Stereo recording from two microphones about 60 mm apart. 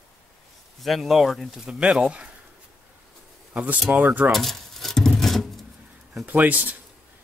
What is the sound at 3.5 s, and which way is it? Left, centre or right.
Speech, right.